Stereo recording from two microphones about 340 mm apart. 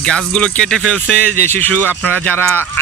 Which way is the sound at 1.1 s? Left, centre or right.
Right.